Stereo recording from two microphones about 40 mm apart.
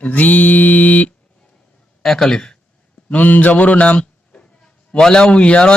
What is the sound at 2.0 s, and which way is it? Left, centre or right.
Speech, centre.